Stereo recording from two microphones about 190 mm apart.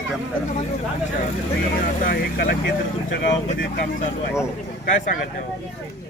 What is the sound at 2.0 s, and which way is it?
Speech, 50° left (ahead or behind).